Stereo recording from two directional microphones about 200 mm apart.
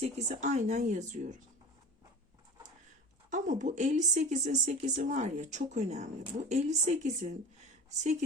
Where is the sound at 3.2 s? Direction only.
40° right (ahead or behind).